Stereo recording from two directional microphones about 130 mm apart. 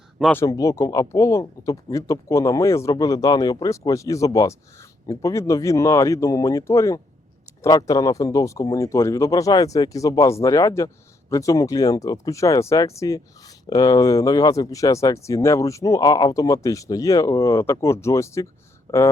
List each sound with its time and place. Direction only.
0.4 s speech: 25° left (ahead or behind)